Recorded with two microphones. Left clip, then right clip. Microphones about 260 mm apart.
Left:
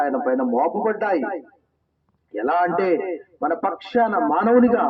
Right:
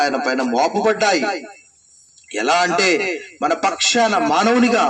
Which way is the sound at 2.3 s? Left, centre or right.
Right.